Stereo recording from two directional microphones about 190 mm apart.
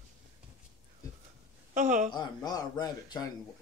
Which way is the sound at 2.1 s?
20° left (ahead or behind).